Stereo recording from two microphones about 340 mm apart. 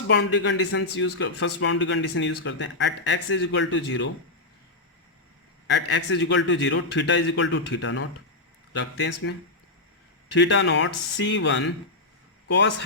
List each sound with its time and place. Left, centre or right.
0.1 s speech: left
5.7 s speech: left
10.3 s a man's voice: left